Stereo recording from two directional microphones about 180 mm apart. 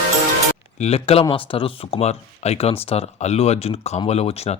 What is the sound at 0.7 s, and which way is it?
Speech, 35° left (ahead or behind).